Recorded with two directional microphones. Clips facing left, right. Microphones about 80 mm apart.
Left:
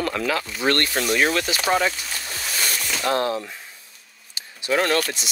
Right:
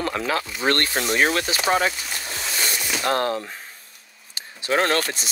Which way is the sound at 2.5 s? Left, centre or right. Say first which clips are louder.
Even; centre.